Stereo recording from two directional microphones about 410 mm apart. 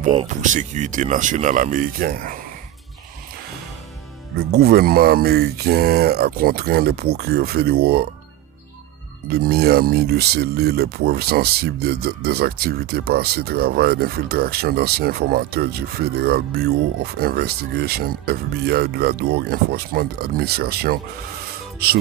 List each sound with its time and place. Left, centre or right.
0.0 s speech: centre
4.6 s speech: right
9.3 s speech: right